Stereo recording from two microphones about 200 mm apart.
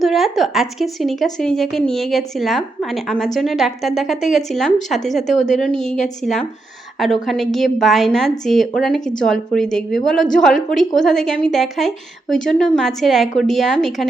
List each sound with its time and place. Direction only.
0.0 s a woman's voice: centre (ahead or behind)